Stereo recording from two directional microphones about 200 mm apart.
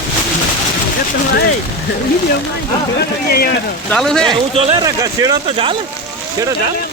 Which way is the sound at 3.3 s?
50° left (ahead or behind).